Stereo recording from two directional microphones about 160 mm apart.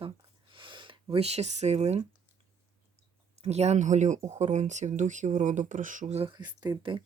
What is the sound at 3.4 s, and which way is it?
Speech, 40° right (ahead or behind).